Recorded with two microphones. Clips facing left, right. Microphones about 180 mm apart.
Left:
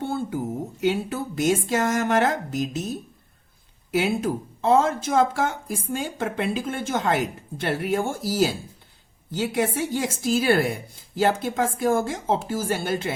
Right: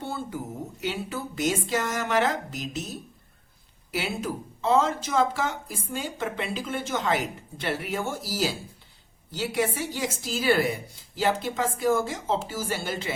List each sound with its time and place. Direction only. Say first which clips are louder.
0.0 s a sound: left 6 dB; 50° left (ahead or behind)
0.8 s a woman's voice: left 7 dB; 50° left (ahead or behind)
3.9 s a woman's voice: left 7 dB; 50° left (ahead or behind)